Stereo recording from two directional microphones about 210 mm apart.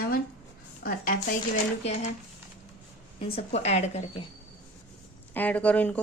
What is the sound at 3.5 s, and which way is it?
Speech, 30° left (ahead or behind).